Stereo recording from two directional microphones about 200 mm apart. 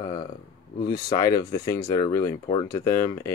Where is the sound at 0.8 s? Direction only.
20° left (ahead or behind).